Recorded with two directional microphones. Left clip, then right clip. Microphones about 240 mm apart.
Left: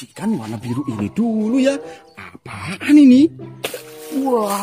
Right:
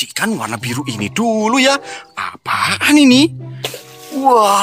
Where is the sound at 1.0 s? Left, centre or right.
Right.